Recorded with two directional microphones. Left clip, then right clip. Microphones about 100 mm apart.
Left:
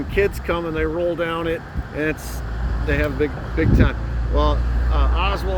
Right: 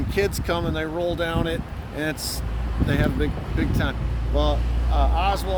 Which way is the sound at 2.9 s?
90° right.